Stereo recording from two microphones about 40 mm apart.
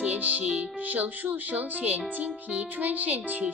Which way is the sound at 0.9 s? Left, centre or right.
Right.